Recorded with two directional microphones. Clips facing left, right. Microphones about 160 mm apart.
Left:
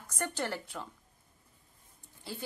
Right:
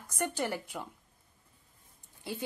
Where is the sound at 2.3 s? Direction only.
15° right (ahead or behind).